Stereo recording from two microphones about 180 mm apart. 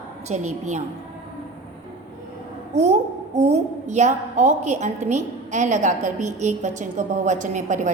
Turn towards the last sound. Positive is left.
turn(degrees=-40)  # may be behind; listen again after turning